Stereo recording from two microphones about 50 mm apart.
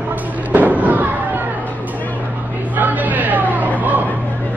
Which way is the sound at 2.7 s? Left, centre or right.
Right.